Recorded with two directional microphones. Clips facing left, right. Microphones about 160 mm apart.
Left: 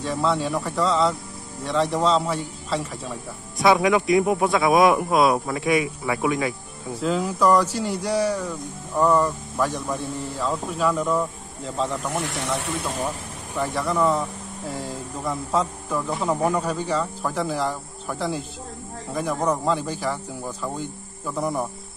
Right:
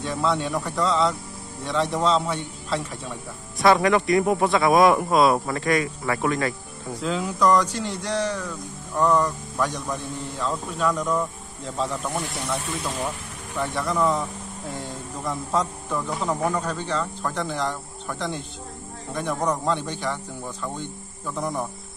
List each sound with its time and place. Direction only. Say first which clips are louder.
0.0 s a man's voice: left 1 dB; centre (ahead or behind)
12.3 s speech: left 2 dB; 80° left
13.6 s a man's voice: left 1 dB; centre (ahead or behind)